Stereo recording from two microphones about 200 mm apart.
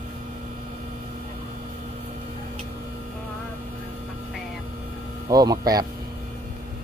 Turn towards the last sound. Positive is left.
turn(degrees=-20)  # may be behind; listen again after turning